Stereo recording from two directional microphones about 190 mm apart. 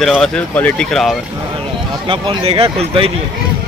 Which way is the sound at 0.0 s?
Centre (ahead or behind).